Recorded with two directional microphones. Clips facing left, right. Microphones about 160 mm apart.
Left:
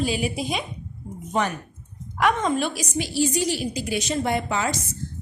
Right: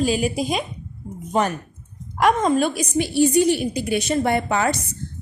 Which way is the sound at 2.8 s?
55° right (ahead or behind).